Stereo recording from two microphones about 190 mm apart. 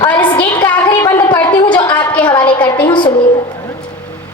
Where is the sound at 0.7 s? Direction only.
10° left (ahead or behind).